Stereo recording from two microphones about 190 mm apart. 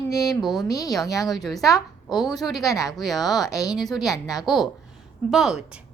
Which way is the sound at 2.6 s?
20° left (ahead or behind).